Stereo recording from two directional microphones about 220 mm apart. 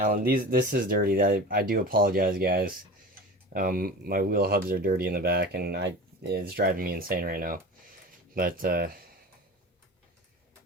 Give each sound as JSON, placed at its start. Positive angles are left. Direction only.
{"t": 0.0, "sound": "speech", "side_deg": -40}